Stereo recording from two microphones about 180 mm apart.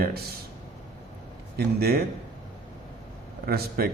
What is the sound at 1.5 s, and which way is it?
Speech, 60° right (ahead or behind).